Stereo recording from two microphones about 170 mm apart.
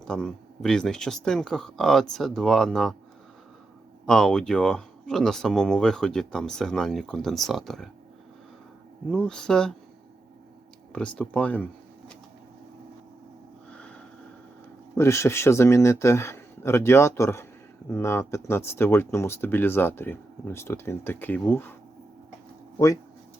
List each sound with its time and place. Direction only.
0.0 s speech: 5° left (ahead or behind)
4.0 s speech: 5° left (ahead or behind)
9.0 s speech: 5° left (ahead or behind)
10.9 s speech: 5° left (ahead or behind)
13.7 s a sound: 5° left (ahead or behind)
14.9 s speech: 15° left (ahead or behind)